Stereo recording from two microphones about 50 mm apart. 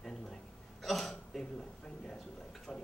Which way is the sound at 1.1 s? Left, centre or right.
Centre.